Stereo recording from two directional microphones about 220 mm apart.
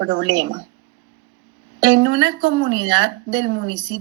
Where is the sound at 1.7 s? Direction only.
60° right (ahead or behind).